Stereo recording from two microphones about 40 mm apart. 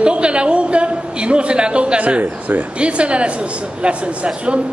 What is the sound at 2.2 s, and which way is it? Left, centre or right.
Speech, right.